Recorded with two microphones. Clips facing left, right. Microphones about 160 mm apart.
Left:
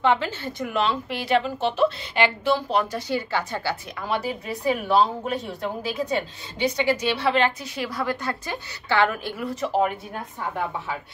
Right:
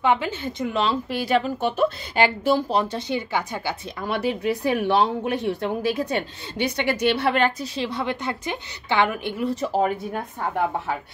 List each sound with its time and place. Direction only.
0.0 s speech: 15° right (ahead or behind); by 2.8 s 40° right (ahead or behind)
2.8 s a woman's voice: 25° right (ahead or behind)
4.1 s speech: 65° right (ahead or behind)
7.6 s a woman's voice: 25° right (ahead or behind)
9.5 s speech: 35° right (ahead or behind)